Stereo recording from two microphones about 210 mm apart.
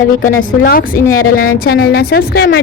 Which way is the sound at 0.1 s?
40° left (ahead or behind).